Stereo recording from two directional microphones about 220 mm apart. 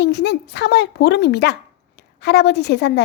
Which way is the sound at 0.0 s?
50° left (ahead or behind).